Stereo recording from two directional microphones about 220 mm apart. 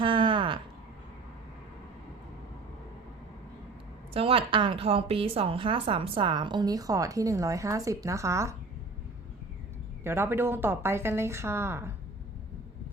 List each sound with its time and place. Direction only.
0.0 s a sound: 20° right (ahead or behind)
4.1 s a woman's voice: 25° right (ahead or behind)
10.0 s a woman's voice: 10° right (ahead or behind)